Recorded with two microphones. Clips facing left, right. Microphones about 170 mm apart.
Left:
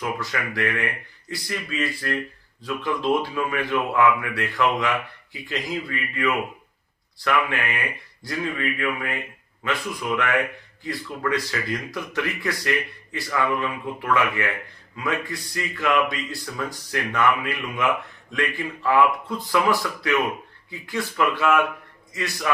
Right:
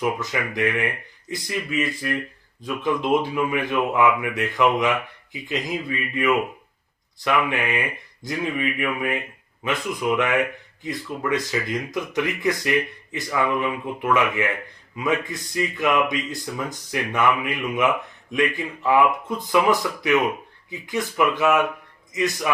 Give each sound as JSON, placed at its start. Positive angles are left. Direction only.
{"t": 0.0, "sound": "speech", "side_deg": -20}